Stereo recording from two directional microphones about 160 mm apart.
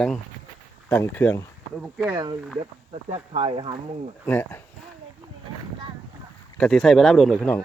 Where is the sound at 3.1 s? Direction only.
40° right (ahead or behind).